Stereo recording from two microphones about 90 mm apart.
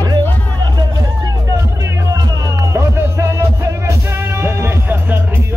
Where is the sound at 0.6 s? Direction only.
50° right (ahead or behind).